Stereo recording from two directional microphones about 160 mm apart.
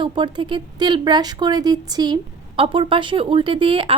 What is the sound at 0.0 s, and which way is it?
A woman's voice, 30° right (ahead or behind).